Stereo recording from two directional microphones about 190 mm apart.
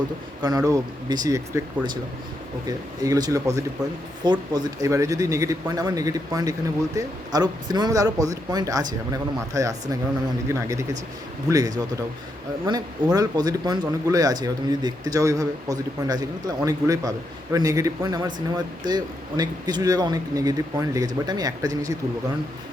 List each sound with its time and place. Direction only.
0.4 s speech: 20° right (ahead or behind)
13.1 s speech: 20° right (ahead or behind)